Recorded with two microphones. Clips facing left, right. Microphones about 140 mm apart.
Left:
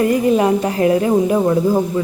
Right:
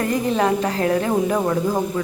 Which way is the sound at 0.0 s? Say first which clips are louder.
Left 6 dB; 15° left (ahead or behind).